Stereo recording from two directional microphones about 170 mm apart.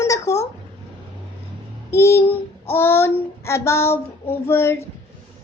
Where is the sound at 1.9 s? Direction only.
15° left (ahead or behind).